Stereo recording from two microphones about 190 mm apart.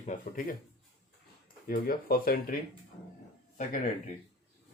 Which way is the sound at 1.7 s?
50° left (ahead or behind).